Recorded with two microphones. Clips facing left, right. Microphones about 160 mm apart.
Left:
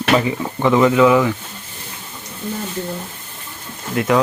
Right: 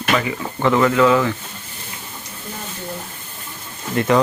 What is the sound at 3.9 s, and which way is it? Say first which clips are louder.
Speech: even; 5° left (ahead or behind).